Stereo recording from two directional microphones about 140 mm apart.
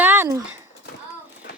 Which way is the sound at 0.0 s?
15° right (ahead or behind).